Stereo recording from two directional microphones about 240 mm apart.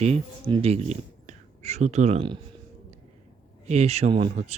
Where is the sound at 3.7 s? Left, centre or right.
Right.